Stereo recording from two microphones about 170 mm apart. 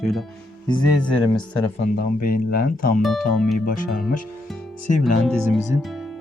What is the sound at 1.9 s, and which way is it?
Speech, 60° left (ahead or behind).